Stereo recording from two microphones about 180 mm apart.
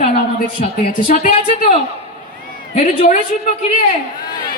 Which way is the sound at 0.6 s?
45° left (ahead or behind).